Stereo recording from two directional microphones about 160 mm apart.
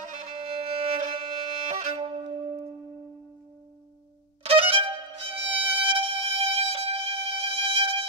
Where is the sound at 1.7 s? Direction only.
40° right (ahead or behind).